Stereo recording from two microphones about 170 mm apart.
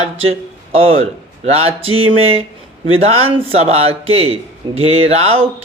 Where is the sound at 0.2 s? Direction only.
35° right (ahead or behind).